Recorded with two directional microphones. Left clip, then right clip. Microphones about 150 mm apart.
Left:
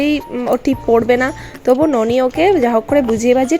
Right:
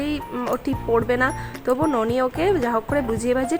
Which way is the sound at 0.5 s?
30° left (ahead or behind).